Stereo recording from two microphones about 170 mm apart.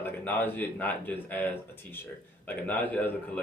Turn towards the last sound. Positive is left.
turn(degrees=10)  # may be behind; listen again after turning